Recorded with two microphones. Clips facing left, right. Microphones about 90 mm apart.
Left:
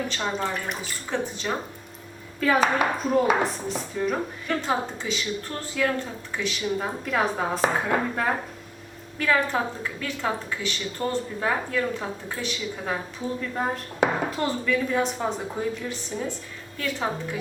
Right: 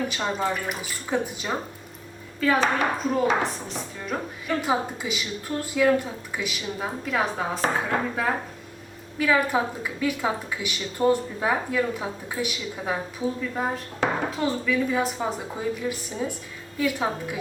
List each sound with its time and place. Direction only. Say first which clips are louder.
0.1 s a woman's voice: right 1 dB; 10° right (ahead or behind)
2.4 s a woman's voice: left 1 dB; centre (ahead or behind)